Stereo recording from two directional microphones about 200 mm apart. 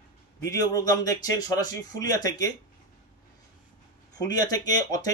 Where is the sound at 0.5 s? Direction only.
20° left (ahead or behind).